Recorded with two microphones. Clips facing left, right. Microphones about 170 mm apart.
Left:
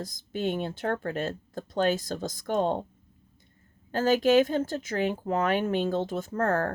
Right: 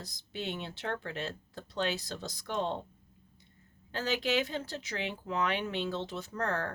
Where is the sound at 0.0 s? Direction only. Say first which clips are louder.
Left 9 dB; 45° left (ahead or behind).